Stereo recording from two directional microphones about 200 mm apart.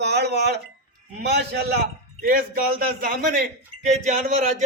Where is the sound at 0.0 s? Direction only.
55° right (ahead or behind).